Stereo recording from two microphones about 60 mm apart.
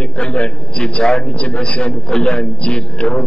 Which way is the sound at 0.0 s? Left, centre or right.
Centre.